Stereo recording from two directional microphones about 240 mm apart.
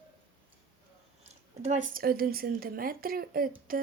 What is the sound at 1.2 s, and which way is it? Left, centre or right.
Speech, right.